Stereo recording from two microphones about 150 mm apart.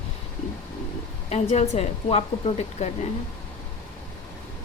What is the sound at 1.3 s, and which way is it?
A woman's voice, 45° left (ahead or behind).